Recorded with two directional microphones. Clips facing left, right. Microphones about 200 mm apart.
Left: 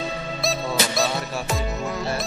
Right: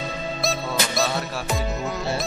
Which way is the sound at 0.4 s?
Centre (ahead or behind).